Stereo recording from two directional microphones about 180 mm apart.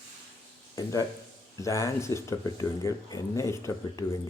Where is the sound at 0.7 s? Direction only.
20° left (ahead or behind).